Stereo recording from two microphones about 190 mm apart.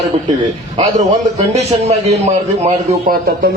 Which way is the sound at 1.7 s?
35° right (ahead or behind).